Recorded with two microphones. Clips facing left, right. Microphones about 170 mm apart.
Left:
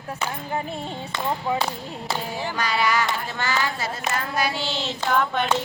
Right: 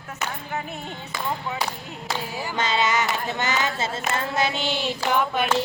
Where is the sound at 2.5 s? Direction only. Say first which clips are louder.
Right 1 dB; 20° right (ahead or behind).